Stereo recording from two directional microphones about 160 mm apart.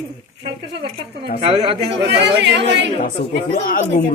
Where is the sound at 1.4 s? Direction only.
35° right (ahead or behind).